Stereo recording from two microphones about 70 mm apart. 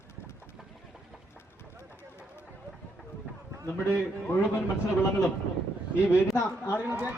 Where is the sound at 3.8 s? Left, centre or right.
Left.